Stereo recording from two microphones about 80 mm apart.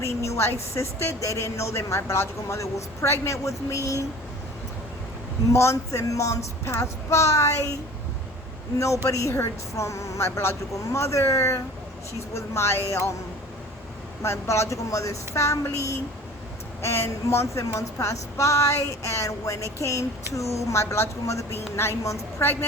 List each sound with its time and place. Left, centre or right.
0.0 s speech: left
5.5 s speech: left
9.0 s speech: left
14.2 s speech: left
16.8 s speech: left